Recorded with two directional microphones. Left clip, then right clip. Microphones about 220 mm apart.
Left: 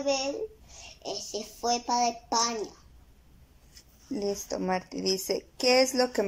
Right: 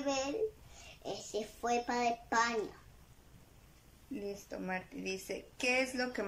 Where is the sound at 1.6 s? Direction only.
10° left (ahead or behind).